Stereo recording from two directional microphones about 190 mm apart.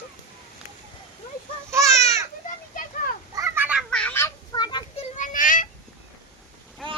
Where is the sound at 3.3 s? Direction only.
15° right (ahead or behind).